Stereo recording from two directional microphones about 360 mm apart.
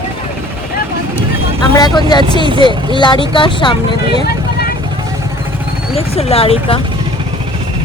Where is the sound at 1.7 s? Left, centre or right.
Centre.